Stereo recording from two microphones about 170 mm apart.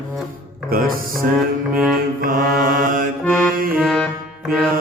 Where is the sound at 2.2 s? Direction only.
55° right (ahead or behind).